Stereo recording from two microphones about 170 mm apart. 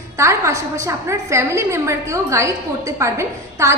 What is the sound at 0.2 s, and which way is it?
A woman's voice, 15° right (ahead or behind).